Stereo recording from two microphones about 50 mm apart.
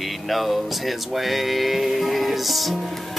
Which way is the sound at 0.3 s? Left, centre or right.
Centre.